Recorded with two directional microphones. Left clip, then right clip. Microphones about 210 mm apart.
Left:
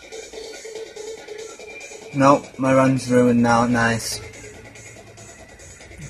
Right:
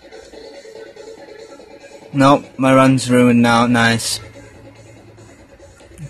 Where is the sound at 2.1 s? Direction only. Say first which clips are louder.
Right 3 dB; 15° right (ahead or behind).